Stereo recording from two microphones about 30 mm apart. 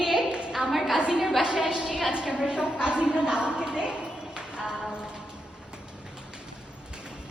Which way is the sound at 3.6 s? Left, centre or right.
Right.